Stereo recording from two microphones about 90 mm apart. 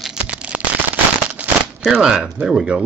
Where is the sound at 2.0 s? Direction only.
5° right (ahead or behind).